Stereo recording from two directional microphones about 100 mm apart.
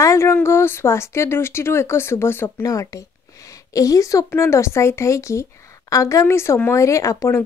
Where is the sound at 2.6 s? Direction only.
35° left (ahead or behind).